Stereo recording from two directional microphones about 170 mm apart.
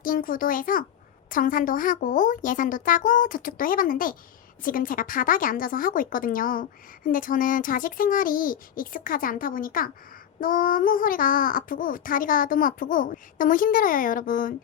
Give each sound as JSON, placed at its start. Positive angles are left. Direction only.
{"t": 0.0, "sound": "a woman's voice", "side_deg": 55}